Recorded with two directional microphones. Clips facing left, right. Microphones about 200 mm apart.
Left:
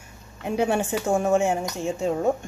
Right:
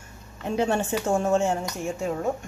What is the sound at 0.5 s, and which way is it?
Speech, 10° left (ahead or behind).